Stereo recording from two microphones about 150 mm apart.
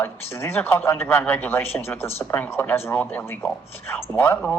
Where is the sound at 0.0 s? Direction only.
15° left (ahead or behind).